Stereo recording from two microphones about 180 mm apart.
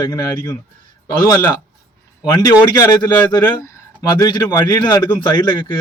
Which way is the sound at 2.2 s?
20° left (ahead or behind).